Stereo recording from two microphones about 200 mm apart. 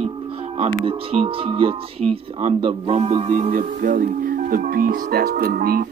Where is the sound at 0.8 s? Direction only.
25° right (ahead or behind).